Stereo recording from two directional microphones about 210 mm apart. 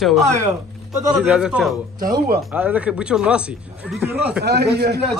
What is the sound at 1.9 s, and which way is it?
Speech, 20° right (ahead or behind).